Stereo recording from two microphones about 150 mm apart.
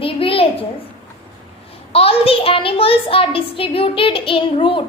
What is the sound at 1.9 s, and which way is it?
A woman's voice, 40° left (ahead or behind).